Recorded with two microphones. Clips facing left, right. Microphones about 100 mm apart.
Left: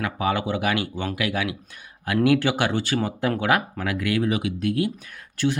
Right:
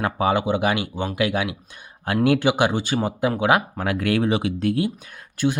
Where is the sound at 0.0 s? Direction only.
25° right (ahead or behind).